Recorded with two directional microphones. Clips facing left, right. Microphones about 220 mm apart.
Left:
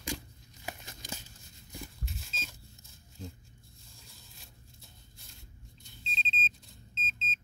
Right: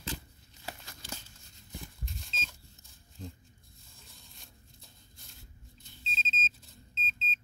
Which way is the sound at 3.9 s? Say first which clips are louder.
Right 1 dB; centre (ahead or behind).